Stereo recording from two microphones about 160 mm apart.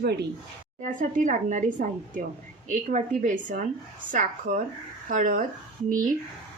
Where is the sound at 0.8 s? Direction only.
50° right (ahead or behind).